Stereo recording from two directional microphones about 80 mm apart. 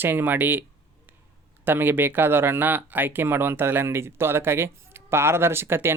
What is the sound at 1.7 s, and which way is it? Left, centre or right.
Speech, right.